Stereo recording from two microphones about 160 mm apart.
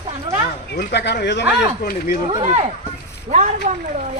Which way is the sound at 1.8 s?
65° left (ahead or behind).